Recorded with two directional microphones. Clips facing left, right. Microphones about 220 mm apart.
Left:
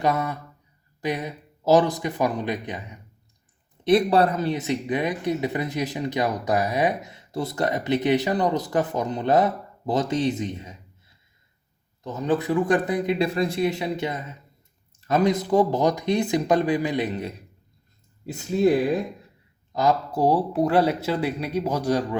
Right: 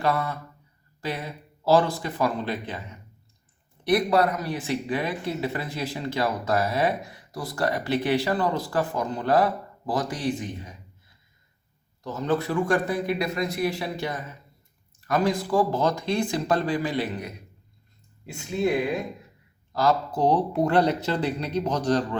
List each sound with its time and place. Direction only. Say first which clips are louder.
0.0 s speech: left 2 dB; 20° left (ahead or behind)
3.8 s speech: left 3 dB; 30° left (ahead or behind)
12.0 s speech: left 2 dB; 15° left (ahead or behind)
18.3 s speech: left 5 dB; 35° left (ahead or behind)
19.7 s speech: left 1 dB; 15° left (ahead or behind)